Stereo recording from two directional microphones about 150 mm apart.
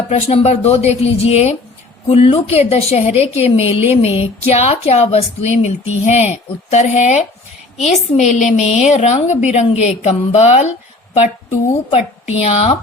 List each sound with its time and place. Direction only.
0.1 s a woman's voice: 45° left (ahead or behind)
12.3 s a woman's voice: 45° left (ahead or behind)